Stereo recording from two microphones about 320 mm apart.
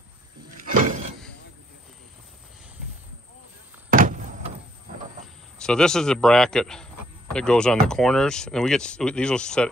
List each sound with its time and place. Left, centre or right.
3.9 s door: right
5.6 s speech: centre